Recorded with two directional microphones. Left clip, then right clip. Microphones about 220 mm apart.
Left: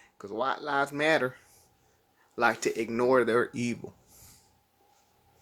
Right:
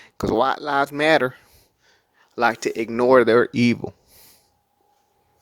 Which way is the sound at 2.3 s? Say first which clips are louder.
Right 6 dB; 40° right (ahead or behind).